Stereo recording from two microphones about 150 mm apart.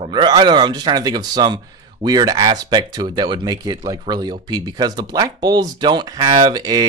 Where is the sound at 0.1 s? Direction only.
30° right (ahead or behind).